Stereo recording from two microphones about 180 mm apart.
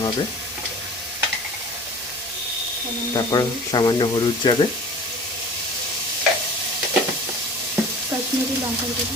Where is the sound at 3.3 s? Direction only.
20° left (ahead or behind).